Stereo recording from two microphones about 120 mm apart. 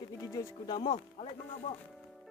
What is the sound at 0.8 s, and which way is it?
Speech, 50° left (ahead or behind).